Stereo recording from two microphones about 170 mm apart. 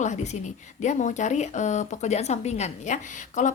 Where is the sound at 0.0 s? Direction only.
45° left (ahead or behind).